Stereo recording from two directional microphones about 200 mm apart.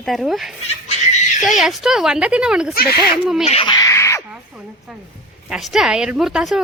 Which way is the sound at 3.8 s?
15° left (ahead or behind).